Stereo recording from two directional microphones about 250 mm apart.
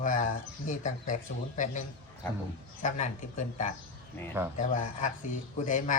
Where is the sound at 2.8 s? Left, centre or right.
Left.